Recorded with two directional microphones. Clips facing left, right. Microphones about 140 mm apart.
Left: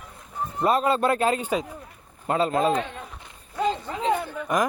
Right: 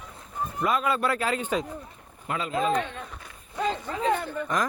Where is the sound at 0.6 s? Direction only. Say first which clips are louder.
Left 4 dB; 35° left (ahead or behind).